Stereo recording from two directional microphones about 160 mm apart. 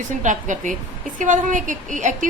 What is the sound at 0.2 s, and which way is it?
A woman's voice, 50° right (ahead or behind).